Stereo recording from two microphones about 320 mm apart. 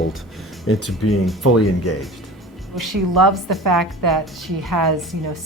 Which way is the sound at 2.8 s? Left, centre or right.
Right.